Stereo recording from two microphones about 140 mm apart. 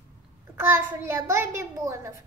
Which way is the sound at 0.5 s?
15° right (ahead or behind).